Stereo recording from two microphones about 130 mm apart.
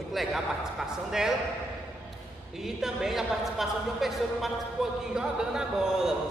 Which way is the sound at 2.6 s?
5° right (ahead or behind).